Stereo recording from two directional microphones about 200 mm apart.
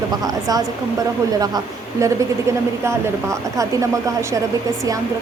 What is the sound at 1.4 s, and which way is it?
Speech, 15° right (ahead or behind).